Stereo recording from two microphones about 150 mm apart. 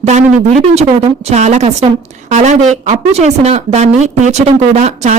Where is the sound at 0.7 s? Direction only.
45° right (ahead or behind).